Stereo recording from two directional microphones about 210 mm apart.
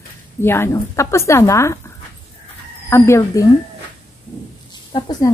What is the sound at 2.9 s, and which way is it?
Speech, 15° left (ahead or behind).